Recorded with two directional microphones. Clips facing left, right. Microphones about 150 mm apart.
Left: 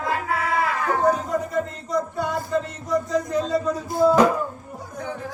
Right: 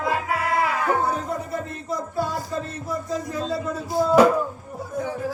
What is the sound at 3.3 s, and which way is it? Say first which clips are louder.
Speech: left 4 dB; 20° left (ahead or behind).